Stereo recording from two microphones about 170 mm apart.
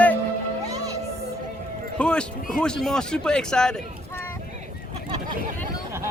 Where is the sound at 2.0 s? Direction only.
5° left (ahead or behind).